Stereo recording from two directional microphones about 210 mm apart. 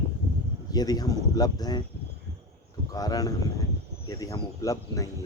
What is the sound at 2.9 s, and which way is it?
Speech, 15° left (ahead or behind).